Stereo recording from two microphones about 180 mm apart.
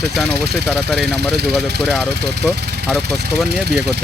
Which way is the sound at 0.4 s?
65° right (ahead or behind).